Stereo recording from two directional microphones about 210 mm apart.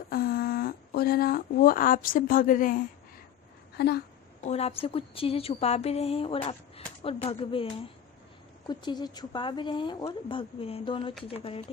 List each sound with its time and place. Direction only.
0.1 s speech: 45° left (ahead or behind)
3.8 s speech: 50° left (ahead or behind)
4.4 s a woman's voice: 30° left (ahead or behind)